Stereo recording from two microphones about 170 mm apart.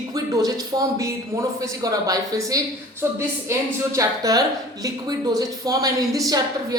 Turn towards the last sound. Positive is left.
turn(degrees=-20)  # may be behind; listen again after turning